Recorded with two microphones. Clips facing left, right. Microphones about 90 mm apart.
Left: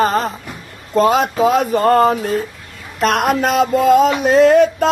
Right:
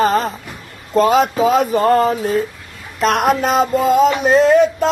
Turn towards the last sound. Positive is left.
turn(degrees=55)  # may be behind; listen again after turning